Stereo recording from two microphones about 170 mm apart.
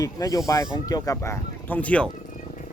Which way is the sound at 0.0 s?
20° left (ahead or behind).